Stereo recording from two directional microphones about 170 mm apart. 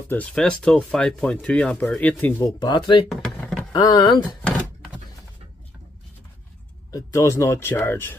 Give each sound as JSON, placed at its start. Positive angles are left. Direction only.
{"t": 0.1, "sound": "speech", "side_deg": 5}
{"t": 2.6, "sound": "speech", "side_deg": 30}
{"t": 3.1, "sound": "vehicle", "side_deg": 0}
{"t": 3.7, "sound": "speech", "side_deg": 25}
{"t": 4.4, "sound": "a sound", "side_deg": 0}
{"t": 6.9, "sound": "speech", "side_deg": 20}